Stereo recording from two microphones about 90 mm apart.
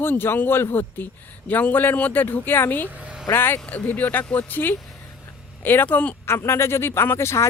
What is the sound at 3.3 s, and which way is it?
Speech, 25° left (ahead or behind).